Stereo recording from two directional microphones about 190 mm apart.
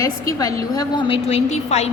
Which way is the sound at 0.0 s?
20° left (ahead or behind).